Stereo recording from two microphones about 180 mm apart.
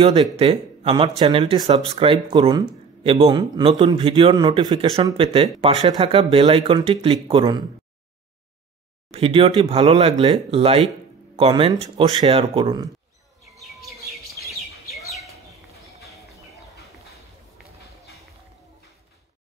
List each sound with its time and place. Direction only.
0.0 s speech: 25° right (ahead or behind)
9.1 s speech: 30° right (ahead or behind)
13.6 s chirp: centre (ahead or behind)